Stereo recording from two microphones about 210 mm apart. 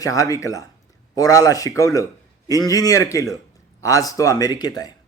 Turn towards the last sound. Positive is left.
turn(degrees=20)  # may be behind; listen again after turning